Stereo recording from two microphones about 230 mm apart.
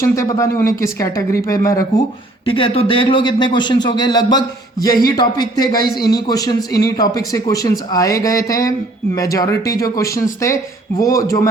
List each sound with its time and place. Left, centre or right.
0.0 s a man's voice: centre